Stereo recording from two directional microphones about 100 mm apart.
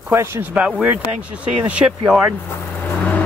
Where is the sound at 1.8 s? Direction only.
35° right (ahead or behind).